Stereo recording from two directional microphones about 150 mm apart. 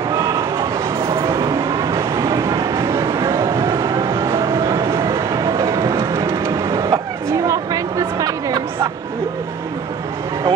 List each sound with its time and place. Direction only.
0.1 s train: 20° right (ahead or behind)
1.0 s vehicle: 20° right (ahead or behind)